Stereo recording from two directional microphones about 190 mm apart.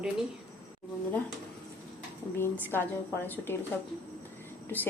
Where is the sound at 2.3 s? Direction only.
10° left (ahead or behind).